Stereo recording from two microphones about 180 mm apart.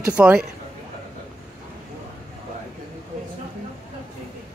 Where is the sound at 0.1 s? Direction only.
5° right (ahead or behind).